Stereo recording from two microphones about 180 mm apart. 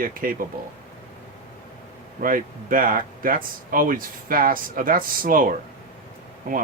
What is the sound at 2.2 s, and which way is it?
Speech, 50° right (ahead or behind).